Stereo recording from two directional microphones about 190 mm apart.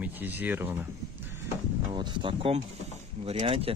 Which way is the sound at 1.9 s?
25° right (ahead or behind).